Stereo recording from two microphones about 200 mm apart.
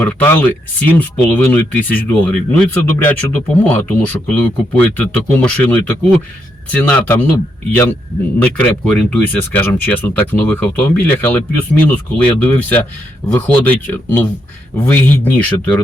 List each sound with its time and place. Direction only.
0.0 s speech: 10° left (ahead or behind)